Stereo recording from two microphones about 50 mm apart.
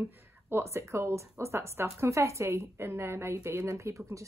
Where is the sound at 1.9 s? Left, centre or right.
Right.